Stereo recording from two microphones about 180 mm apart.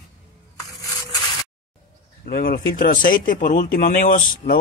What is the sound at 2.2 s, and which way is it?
Speech, 55° left (ahead or behind).